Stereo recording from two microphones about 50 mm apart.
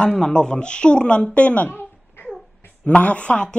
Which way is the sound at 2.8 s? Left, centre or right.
Left.